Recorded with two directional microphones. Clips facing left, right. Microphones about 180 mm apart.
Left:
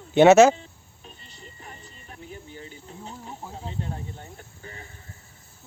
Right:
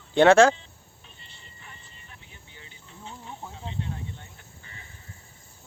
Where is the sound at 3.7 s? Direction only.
40° left (ahead or behind).